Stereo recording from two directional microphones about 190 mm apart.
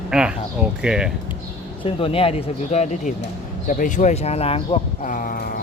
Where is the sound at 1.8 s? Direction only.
30° left (ahead or behind).